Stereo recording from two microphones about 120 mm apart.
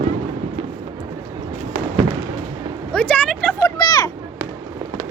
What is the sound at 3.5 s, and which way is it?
Speech, 30° left (ahead or behind).